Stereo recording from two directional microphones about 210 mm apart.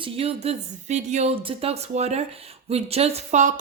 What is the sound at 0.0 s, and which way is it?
A woman's voice, 30° right (ahead or behind).